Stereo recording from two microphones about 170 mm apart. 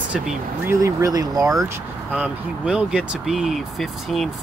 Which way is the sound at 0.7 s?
20° right (ahead or behind).